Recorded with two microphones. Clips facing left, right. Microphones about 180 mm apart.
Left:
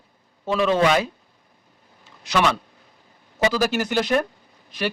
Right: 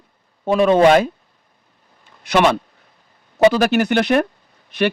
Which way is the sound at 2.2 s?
60° right (ahead or behind).